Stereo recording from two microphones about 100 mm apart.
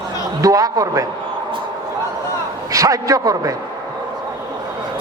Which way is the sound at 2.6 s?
35° right (ahead or behind).